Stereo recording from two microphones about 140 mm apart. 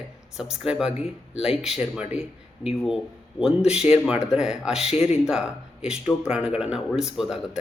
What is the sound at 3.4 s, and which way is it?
Speech, 5° right (ahead or behind).